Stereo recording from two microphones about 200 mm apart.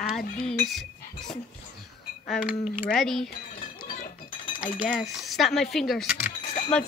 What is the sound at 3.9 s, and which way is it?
Chink, 40° left (ahead or behind).